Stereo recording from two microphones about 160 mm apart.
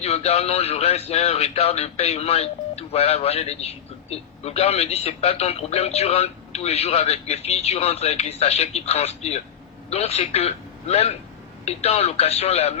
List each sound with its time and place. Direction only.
0.0 s speech: 40° left (ahead or behind)